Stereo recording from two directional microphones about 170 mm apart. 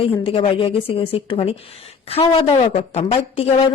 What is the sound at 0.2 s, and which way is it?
Speech, 30° left (ahead or behind).